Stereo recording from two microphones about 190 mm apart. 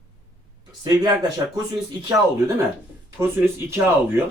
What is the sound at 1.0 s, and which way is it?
Speech, 20° right (ahead or behind).